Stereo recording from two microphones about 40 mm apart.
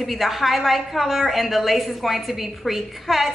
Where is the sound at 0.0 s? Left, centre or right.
Centre.